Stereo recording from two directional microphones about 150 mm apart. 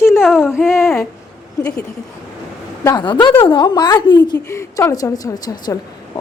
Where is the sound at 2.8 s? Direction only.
30° left (ahead or behind).